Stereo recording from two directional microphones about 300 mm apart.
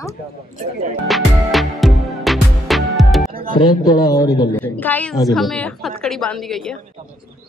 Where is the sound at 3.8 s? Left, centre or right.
Centre.